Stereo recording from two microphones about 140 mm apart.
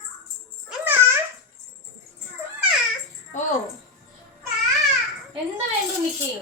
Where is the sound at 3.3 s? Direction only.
60° left (ahead or behind).